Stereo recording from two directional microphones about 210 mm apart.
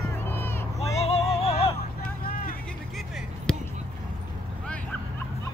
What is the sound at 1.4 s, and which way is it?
Hubbub, 25° left (ahead or behind).